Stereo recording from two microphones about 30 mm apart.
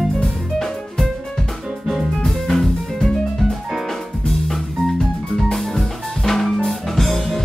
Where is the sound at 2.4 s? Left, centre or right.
Centre.